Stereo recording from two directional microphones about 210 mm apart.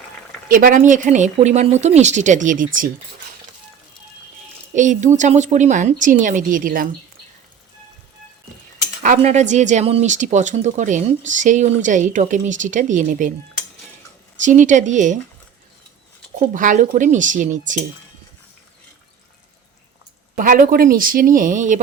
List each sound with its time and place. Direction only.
0.4 s speech: 40° right (ahead or behind)
4.7 s speech: 35° right (ahead or behind)
9.0 s speech: 35° right (ahead or behind)
14.4 s speech: 35° right (ahead or behind)
16.5 s speech: 35° right (ahead or behind)
20.3 s speech: 40° right (ahead or behind)